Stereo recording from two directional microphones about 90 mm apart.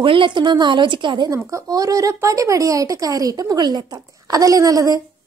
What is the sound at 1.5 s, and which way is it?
Speech, 40° right (ahead or behind).